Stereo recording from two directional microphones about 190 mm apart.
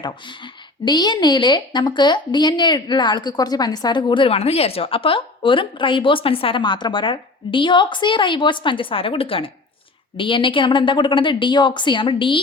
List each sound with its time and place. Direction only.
0.0 s a woman's voice: 25° left (ahead or behind)